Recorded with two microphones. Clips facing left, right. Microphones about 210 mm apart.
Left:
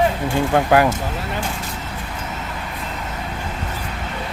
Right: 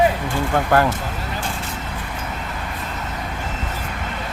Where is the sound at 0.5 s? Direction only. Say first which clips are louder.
Left 2 dB; 10° left (ahead or behind).